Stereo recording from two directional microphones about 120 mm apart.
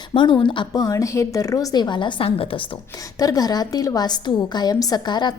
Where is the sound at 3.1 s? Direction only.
30° left (ahead or behind).